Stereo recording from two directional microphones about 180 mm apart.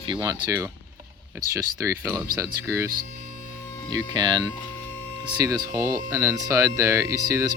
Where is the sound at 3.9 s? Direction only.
25° right (ahead or behind).